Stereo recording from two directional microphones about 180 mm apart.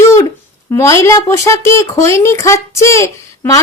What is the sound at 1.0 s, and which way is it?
Speech, 15° left (ahead or behind).